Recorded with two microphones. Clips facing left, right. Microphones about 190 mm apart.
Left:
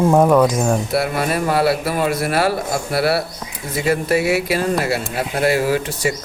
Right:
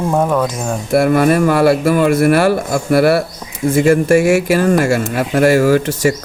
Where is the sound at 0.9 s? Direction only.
50° right (ahead or behind).